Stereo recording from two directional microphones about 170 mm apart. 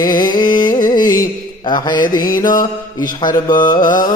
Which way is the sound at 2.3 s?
55° left (ahead or behind).